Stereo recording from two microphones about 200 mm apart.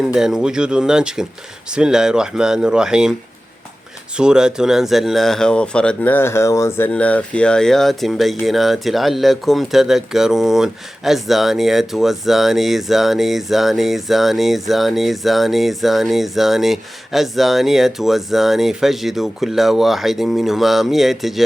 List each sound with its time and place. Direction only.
0.0 s speech: centre (ahead or behind)
4.2 s speech: 5° right (ahead or behind)